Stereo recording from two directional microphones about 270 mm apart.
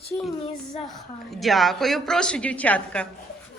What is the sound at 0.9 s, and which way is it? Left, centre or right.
A woman's voice, centre.